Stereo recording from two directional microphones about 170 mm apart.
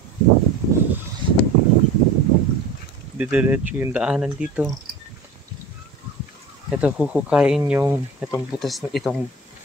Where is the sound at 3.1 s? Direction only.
10° right (ahead or behind).